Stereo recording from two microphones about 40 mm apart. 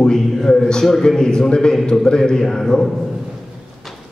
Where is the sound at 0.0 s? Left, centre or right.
Centre.